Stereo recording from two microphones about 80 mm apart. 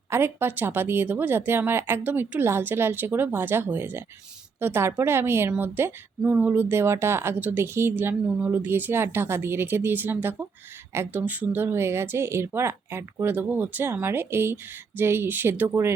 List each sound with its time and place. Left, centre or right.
0.1 s a woman's voice: right